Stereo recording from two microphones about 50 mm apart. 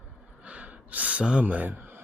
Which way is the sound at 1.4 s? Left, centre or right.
Right.